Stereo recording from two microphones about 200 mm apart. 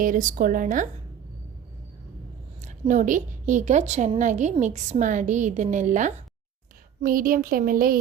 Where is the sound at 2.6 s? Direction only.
40° right (ahead or behind).